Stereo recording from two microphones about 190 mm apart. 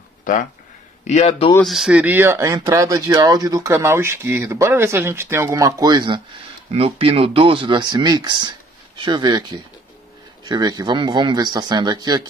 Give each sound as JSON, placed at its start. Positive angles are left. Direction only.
{"t": 0.2, "sound": "a sound", "side_deg": 45}
{"t": 1.0, "sound": "a man's voice", "side_deg": 35}
{"t": 1.5, "sound": "speech", "side_deg": 0}